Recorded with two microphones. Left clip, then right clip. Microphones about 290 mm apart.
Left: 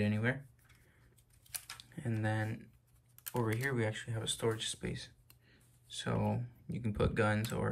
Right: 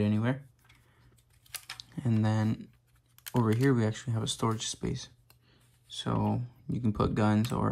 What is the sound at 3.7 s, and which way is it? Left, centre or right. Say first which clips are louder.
Speech: right 4 dB; centre.